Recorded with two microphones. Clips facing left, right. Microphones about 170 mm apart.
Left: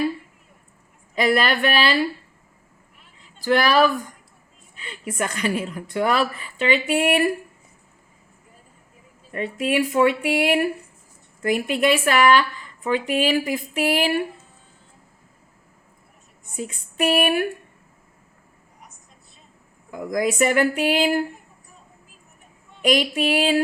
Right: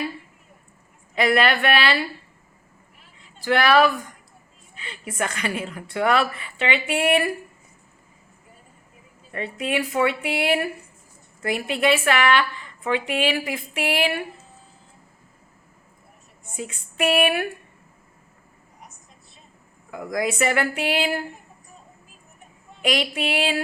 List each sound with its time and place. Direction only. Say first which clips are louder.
1.1 s speech: even; 40° left (ahead or behind)
3.2 s a sound: left 2 dB; 40° left (ahead or behind)
4.8 s speech: left 1 dB; 40° left (ahead or behind)
9.3 s speech: left 3 dB; 40° left (ahead or behind)
16.6 s speech: left 1 dB; 40° left (ahead or behind)
19.9 s speech: left 2 dB; 40° left (ahead or behind)
22.8 s speech: left 4 dB; 40° left (ahead or behind)